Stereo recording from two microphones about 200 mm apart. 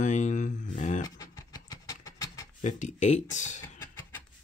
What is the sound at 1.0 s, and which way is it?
Music, 15° left (ahead or behind).